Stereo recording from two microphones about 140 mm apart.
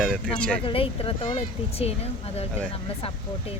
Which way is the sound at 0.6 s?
40° left (ahead or behind).